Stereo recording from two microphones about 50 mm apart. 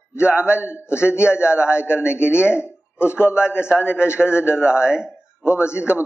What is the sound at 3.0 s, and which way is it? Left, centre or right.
Speech, left.